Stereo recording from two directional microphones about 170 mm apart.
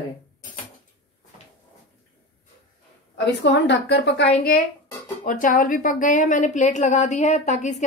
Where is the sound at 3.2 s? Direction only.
90° left; by 4.6 s 70° left (ahead or behind).